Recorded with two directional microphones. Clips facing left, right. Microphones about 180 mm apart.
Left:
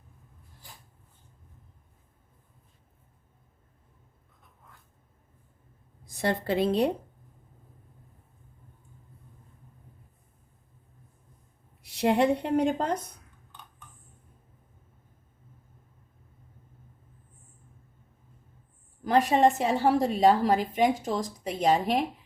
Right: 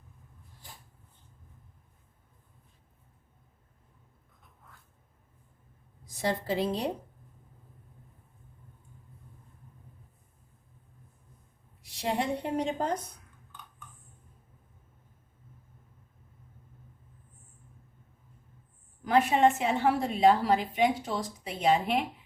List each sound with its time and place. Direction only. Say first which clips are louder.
6.1 s a woman's voice: left 3 dB; 60° left (ahead or behind)
11.8 s a woman's voice: left 8 dB; 65° left (ahead or behind)
19.0 s a woman's voice: left 2 dB; 35° left (ahead or behind)